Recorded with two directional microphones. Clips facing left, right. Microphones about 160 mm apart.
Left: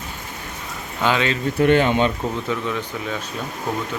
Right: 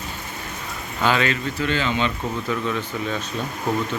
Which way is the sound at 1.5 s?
55° left (ahead or behind).